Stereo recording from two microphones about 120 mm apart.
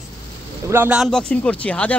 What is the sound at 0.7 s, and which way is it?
Speech, 15° right (ahead or behind).